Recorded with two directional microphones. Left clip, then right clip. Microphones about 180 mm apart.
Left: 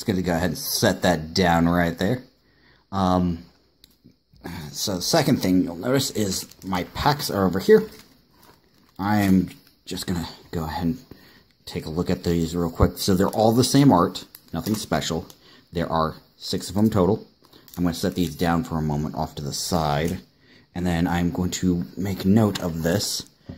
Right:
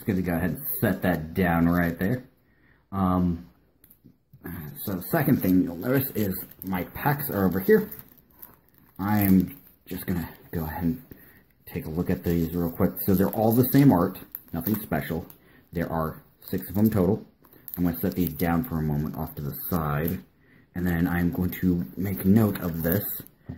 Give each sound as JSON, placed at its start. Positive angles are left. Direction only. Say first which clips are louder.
{"t": 0.0, "sound": "speech", "louder": "left 4 dB", "side_deg": 15}
{"t": 4.4, "sound": "speech", "louder": "left 11 dB", "side_deg": 20}
{"t": 8.9, "sound": "speech", "louder": "left 3 dB", "side_deg": 15}
{"t": 12.0, "sound": "speech", "louder": "left 3 dB", "side_deg": 20}